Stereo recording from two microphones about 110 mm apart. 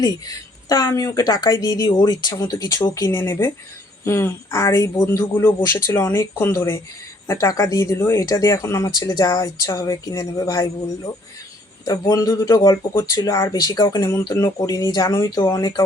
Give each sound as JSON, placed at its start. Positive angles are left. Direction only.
{"t": 0.0, "sound": "a woman's voice", "side_deg": 35}
{"t": 5.3, "sound": "a woman's voice", "side_deg": 15}